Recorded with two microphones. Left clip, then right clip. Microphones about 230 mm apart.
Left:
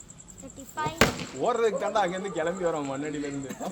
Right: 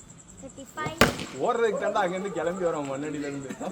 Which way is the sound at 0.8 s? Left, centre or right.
Left.